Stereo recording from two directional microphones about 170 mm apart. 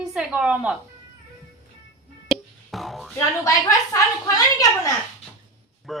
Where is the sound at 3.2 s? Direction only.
20° left (ahead or behind).